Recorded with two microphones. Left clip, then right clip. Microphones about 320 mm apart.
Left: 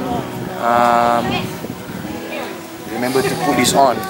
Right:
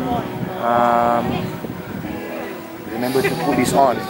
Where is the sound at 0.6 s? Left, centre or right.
Centre.